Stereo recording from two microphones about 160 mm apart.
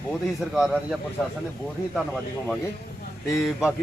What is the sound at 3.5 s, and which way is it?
Speech, 5° right (ahead or behind).